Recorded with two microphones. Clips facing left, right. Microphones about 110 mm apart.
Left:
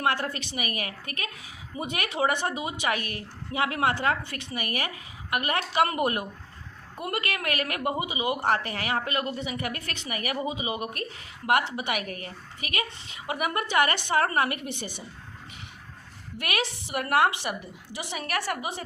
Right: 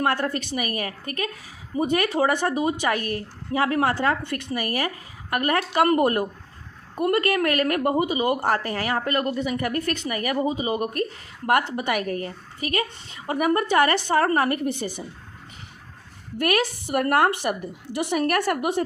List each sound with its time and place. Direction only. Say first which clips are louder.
0.0 s a woman's voice: right 4 dB; 40° right (ahead or behind)
16.4 s speech: right 8 dB; 45° right (ahead or behind)